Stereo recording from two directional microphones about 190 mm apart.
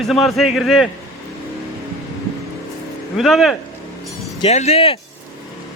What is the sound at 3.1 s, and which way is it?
Speech, centre (ahead or behind).